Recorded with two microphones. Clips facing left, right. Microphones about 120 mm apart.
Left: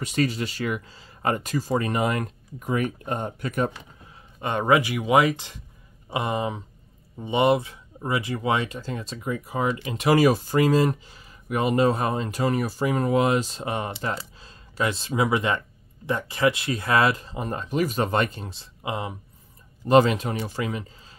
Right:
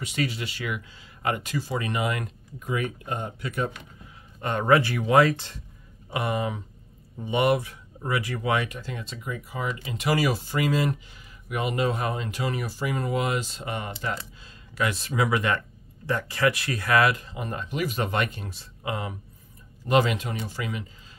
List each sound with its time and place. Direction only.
0.0 s speech: 45° left (ahead or behind)
4.4 s speech: 15° left (ahead or behind)
19.9 s speech: 35° left (ahead or behind)